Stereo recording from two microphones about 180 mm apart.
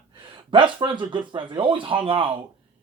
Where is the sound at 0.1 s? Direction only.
25° right (ahead or behind).